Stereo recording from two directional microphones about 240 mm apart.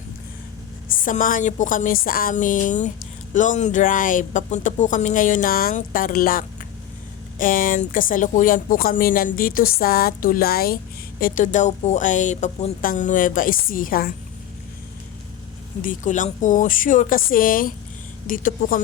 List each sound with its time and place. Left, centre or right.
0.9 s speech: left
15.8 s speech: left